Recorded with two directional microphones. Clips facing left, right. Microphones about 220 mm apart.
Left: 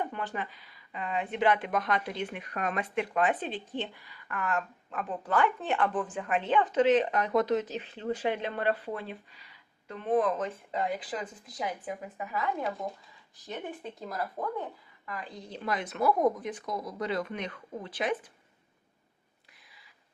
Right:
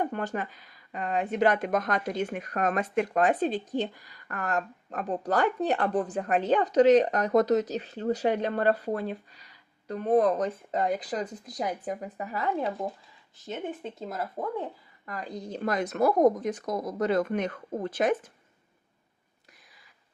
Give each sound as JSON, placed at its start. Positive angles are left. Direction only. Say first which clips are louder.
{"t": 0.0, "sound": "speech", "louder": "right 5 dB", "side_deg": -45}
{"t": 15.0, "sound": "speech", "louder": "right 5 dB", "side_deg": -40}